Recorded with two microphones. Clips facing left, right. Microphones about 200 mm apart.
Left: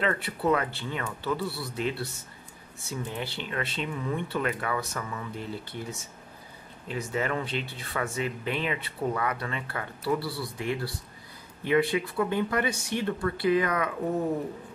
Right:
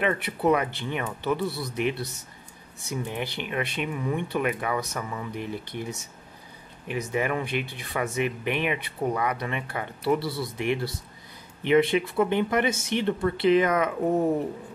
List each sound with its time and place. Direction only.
0.0 s speech: 20° right (ahead or behind)